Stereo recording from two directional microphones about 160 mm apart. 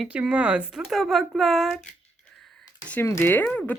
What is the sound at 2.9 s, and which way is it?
Speech, 15° left (ahead or behind).